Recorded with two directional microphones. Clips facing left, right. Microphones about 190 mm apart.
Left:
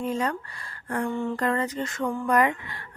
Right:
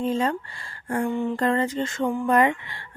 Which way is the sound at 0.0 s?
25° right (ahead or behind).